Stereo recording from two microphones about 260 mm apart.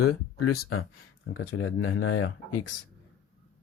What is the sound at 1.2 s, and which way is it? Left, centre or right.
Speech, left.